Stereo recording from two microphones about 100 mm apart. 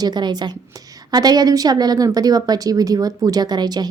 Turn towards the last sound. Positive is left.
turn(degrees=-45)  # may be behind; listen again after turning